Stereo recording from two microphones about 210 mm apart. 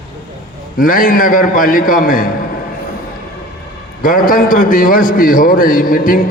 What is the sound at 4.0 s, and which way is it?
A man's voice, 40° left (ahead or behind).